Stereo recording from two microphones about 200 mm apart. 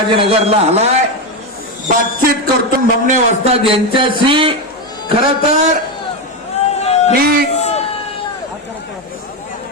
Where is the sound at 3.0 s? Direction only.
30° right (ahead or behind).